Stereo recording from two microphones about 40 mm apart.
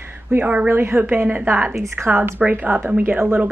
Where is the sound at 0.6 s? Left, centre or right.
Right.